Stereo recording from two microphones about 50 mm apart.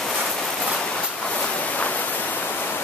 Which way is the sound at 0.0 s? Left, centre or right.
Centre.